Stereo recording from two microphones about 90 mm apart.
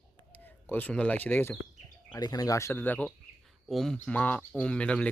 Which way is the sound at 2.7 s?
20° left (ahead or behind).